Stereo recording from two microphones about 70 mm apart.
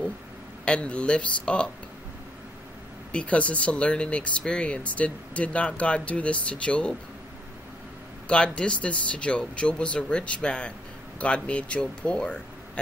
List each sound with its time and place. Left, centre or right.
0.7 s speech: centre
3.1 s speech: centre
8.5 s speech: centre